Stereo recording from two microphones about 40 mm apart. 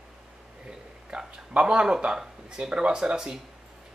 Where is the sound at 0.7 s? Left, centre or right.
Right.